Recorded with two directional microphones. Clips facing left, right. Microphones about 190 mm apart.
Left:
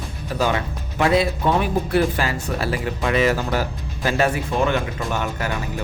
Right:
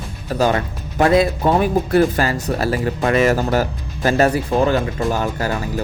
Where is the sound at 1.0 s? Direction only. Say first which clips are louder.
Right 4 dB; 45° right (ahead or behind).